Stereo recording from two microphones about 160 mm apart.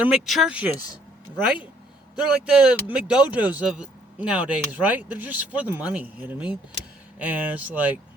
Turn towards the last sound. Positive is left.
turn(degrees=-10)  # may be behind; listen again after turning